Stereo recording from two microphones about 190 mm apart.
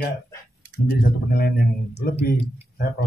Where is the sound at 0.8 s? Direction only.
55° left (ahead or behind).